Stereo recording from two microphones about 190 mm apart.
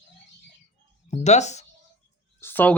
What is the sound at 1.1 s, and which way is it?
Speech, 35° left (ahead or behind).